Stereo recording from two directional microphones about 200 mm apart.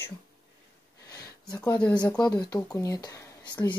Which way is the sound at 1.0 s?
20° left (ahead or behind).